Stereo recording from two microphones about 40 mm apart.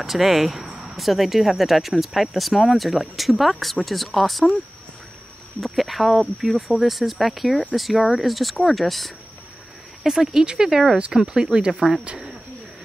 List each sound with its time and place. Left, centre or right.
0.0 s speech: centre
5.6 s speech: centre
10.0 s speech: centre